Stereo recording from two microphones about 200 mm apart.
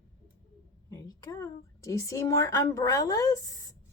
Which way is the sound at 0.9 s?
15° left (ahead or behind).